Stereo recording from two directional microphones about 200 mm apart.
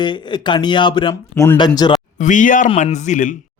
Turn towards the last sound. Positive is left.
turn(degrees=40)  # may be behind; listen again after turning